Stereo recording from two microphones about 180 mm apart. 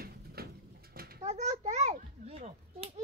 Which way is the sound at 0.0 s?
60° right (ahead or behind).